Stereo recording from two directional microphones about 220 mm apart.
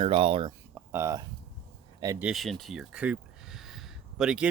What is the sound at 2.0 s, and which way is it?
Speech, 15° right (ahead or behind).